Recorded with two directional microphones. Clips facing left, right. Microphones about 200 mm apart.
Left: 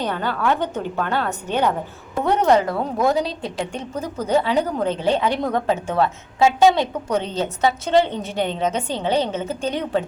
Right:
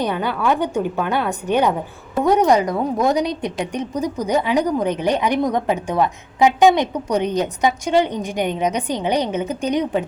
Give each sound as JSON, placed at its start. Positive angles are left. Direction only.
{"t": 0.0, "sound": "a woman's voice", "side_deg": -15}